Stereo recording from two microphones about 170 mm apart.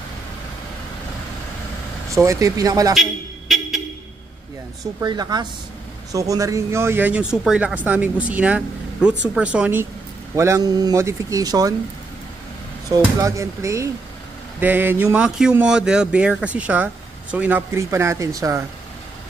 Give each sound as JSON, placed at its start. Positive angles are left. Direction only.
{"t": 2.0, "sound": "speech", "side_deg": -15}
{"t": 2.9, "sound": "a sound", "side_deg": 0}
{"t": 5.0, "sound": "speech", "side_deg": -25}
{"t": 13.0, "sound": "speech", "side_deg": -15}